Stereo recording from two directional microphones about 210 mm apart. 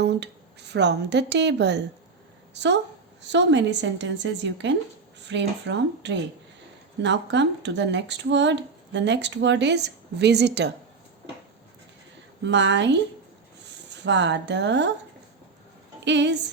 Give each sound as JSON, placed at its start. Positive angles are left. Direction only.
{"t": 0.0, "sound": "speech", "side_deg": -55}
{"t": 12.4, "sound": "speech", "side_deg": -55}
{"t": 16.0, "sound": "speech", "side_deg": -55}